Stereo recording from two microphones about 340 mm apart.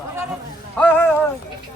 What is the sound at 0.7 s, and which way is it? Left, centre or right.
Speech, centre.